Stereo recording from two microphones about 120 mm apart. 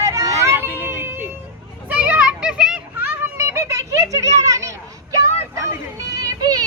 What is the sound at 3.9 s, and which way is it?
Children playing, 30° right (ahead or behind).